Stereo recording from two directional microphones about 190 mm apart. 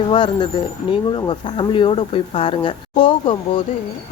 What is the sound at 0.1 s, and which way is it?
Speech, 25° left (ahead or behind).